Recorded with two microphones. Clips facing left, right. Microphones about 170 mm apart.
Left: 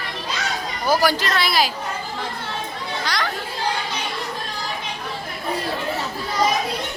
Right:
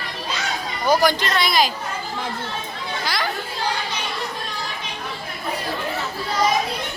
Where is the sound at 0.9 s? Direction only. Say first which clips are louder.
Right 1 dB; 5° left (ahead or behind).